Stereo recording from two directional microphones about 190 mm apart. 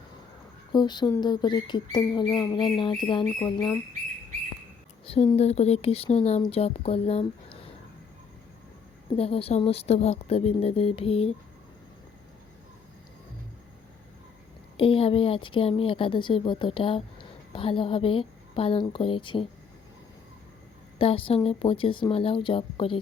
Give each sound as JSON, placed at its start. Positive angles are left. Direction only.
{"t": 0.7, "sound": "speech", "side_deg": 20}
{"t": 5.0, "sound": "speech", "side_deg": 30}
{"t": 9.1, "sound": "speech", "side_deg": 30}
{"t": 14.8, "sound": "speech", "side_deg": 30}
{"t": 21.0, "sound": "speech", "side_deg": 30}